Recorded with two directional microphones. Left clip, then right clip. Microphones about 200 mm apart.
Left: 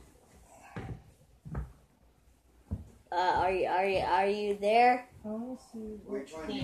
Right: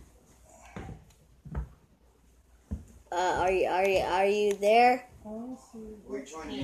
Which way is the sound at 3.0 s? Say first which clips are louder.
Right 1 dB; 35° right (ahead or behind).